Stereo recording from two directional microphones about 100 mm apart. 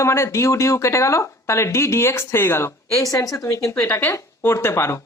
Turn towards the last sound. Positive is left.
turn(degrees=25)  # may be behind; listen again after turning